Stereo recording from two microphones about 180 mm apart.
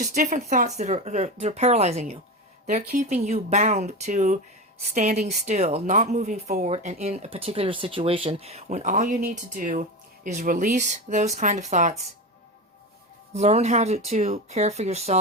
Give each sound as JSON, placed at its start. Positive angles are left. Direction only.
{"t": 0.0, "sound": "speech", "side_deg": -40}
{"t": 13.3, "sound": "speech", "side_deg": -40}